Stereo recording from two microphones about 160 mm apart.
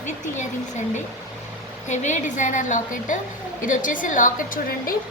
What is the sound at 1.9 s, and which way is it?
A woman's voice, 50° left (ahead or behind).